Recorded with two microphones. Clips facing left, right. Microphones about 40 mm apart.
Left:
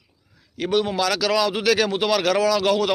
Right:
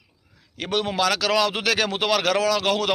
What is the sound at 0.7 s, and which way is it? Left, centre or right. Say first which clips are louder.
Speech: left 3 dB; right.